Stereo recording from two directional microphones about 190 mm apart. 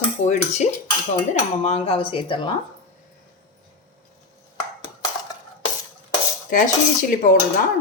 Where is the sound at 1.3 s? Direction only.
35° left (ahead or behind).